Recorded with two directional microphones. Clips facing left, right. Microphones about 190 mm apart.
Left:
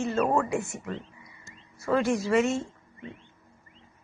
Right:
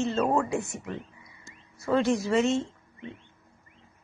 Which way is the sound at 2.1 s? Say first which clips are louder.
Even; 25° right (ahead or behind).